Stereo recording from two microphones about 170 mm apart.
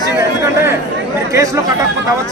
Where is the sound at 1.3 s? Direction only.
20° right (ahead or behind).